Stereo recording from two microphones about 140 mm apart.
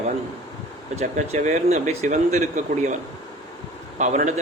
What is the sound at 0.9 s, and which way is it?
Speech, 55° right (ahead or behind).